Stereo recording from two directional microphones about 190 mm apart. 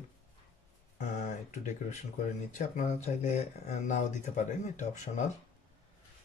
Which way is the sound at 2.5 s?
40° left (ahead or behind).